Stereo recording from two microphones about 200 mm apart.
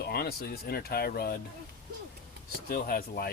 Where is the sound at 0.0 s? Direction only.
50° left (ahead or behind).